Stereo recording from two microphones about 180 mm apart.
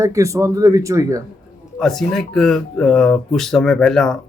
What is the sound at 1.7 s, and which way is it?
Speech, centre (ahead or behind).